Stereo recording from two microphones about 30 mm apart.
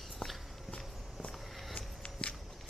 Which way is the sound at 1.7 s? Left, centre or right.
Left.